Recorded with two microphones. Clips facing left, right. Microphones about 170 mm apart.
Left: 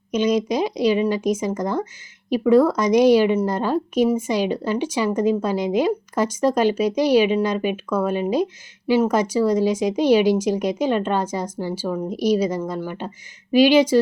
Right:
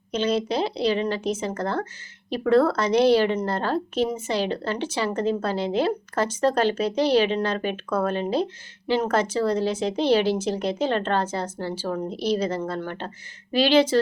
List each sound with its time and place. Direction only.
0.1 s a woman's voice: 10° left (ahead or behind)